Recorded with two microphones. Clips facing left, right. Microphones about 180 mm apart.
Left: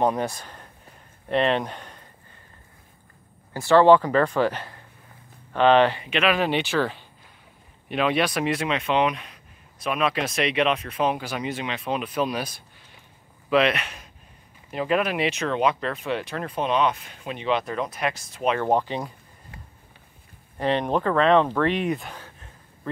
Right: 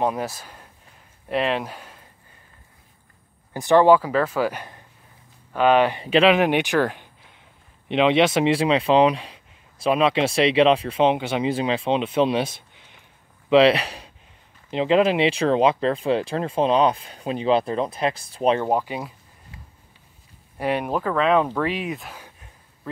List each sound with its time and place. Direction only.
0.0 s speech: 5° right (ahead or behind)
3.5 s speech: 15° right (ahead or behind)
6.0 s speech: 30° right (ahead or behind)
6.3 s speech: 15° right (ahead or behind); by 18.6 s 35° right (ahead or behind)
18.7 s speech: 5° right (ahead or behind)
20.5 s speech: 10° right (ahead or behind)